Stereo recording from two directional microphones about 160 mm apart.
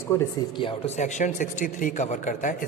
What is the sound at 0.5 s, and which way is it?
Speech, 35° left (ahead or behind).